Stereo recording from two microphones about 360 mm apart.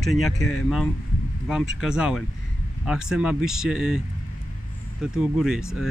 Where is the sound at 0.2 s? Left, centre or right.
Left.